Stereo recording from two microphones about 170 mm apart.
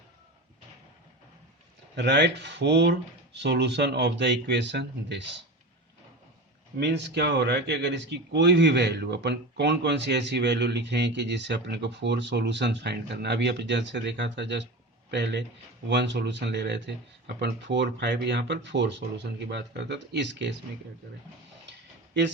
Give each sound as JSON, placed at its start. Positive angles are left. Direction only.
{"t": 2.0, "sound": "a man's voice", "side_deg": -85}
{"t": 6.7, "sound": "a man's voice", "side_deg": -80}
{"t": 21.7, "sound": "a sound", "side_deg": -90}